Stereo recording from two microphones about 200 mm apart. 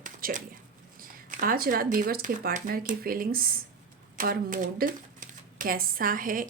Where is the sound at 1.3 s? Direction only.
45° right (ahead or behind).